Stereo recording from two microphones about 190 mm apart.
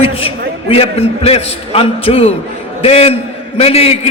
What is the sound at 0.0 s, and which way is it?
A man's voice, 30° left (ahead or behind).